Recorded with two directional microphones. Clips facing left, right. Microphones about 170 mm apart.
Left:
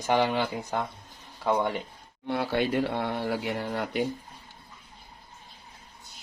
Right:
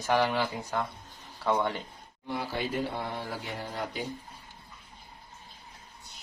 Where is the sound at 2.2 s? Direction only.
70° left (ahead or behind).